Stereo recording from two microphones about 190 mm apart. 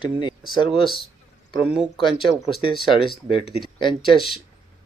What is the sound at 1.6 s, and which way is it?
Speech, 5° right (ahead or behind).